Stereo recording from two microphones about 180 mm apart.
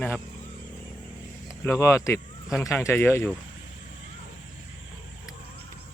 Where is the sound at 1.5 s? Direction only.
15° left (ahead or behind).